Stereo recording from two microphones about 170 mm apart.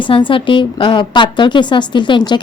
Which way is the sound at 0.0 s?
30° left (ahead or behind).